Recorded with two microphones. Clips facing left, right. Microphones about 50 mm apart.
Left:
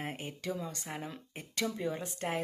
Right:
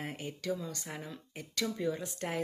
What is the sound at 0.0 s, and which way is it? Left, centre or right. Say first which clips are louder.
Speech: even; left.